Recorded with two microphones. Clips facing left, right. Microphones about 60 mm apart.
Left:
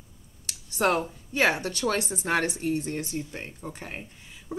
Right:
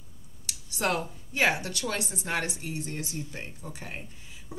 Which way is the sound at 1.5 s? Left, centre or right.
Left.